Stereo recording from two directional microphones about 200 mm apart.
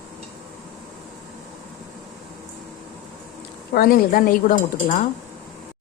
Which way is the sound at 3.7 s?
45° left (ahead or behind).